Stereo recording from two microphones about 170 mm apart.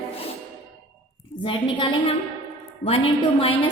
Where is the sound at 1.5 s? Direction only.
30° left (ahead or behind).